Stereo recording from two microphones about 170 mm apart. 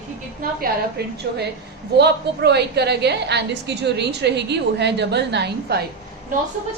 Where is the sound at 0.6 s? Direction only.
70° right (ahead or behind).